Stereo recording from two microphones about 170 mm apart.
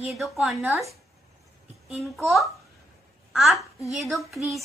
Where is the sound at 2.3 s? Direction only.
Centre (ahead or behind).